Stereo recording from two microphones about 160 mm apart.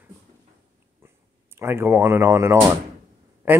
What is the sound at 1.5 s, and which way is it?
Speech, 15° right (ahead or behind).